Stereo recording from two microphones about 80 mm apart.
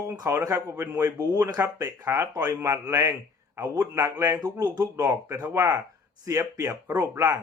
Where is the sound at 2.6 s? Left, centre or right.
Right.